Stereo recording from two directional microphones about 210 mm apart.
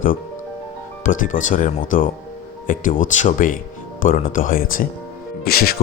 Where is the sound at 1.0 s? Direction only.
40° left (ahead or behind).